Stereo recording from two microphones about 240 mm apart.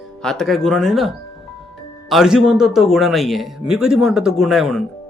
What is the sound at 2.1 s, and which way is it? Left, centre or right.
Speech, centre.